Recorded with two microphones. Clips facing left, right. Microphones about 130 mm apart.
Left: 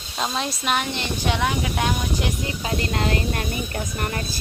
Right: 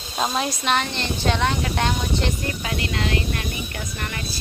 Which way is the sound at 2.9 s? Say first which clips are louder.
Left 1 dB; 40° left (ahead or behind).